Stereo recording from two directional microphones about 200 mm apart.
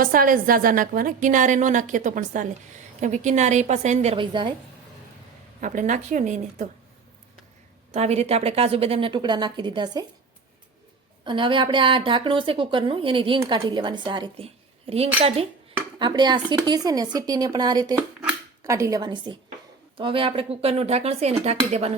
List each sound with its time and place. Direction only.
0.0 s a woman's voice: 45° right (ahead or behind); by 4.5 s 25° right (ahead or behind)
5.5 s a woman's voice: 40° right (ahead or behind)
7.9 s a woman's voice: 30° right (ahead or behind)
11.2 s a woman's voice: 25° right (ahead or behind)